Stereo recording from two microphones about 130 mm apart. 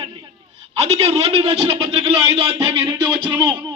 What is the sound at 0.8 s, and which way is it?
A man's voice, 50° right (ahead or behind).